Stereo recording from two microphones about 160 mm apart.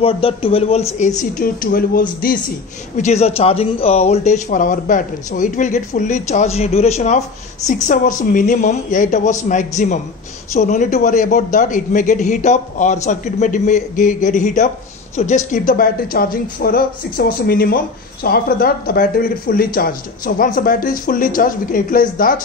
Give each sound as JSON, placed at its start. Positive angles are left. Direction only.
{"t": 0.0, "sound": "speech", "side_deg": 35}
{"t": 3.0, "sound": "speech", "side_deg": 40}